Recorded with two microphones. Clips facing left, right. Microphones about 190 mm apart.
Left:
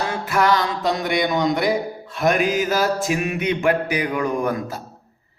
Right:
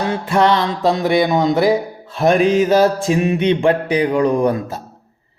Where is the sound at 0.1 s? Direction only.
25° right (ahead or behind).